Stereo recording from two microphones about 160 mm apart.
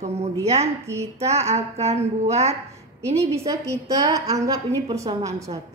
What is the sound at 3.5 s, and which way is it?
A woman's voice, 20° right (ahead or behind).